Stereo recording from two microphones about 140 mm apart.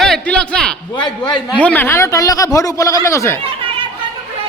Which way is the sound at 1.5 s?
10° left (ahead or behind).